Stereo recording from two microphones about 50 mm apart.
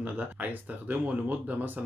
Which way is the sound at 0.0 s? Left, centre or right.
Right.